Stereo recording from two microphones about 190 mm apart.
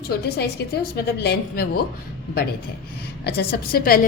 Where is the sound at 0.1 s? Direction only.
60° left (ahead or behind).